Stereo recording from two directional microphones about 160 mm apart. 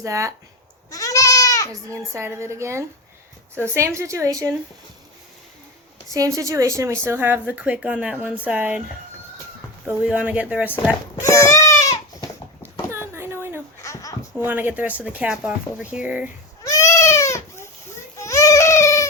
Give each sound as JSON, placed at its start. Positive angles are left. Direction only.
{"t": 0.0, "sound": "a woman's voice", "side_deg": -20}
{"t": 0.9, "sound": "goat", "side_deg": 20}
{"t": 1.9, "sound": "a woman's voice", "side_deg": -15}
{"t": 6.1, "sound": "a woman's voice", "side_deg": -20}
{"t": 9.8, "sound": "a woman's voice", "side_deg": -10}
{"t": 11.2, "sound": "baby cry", "side_deg": 20}
{"t": 12.9, "sound": "a sound", "side_deg": -15}
{"t": 13.8, "sound": "a sound", "side_deg": 20}
{"t": 14.3, "sound": "a woman's voice", "side_deg": -10}
{"t": 16.6, "sound": "baby cry", "side_deg": 20}
{"t": 18.2, "sound": "a sound", "side_deg": 20}